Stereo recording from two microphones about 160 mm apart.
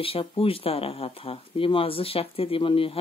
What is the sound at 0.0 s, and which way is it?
Speech, 35° left (ahead or behind).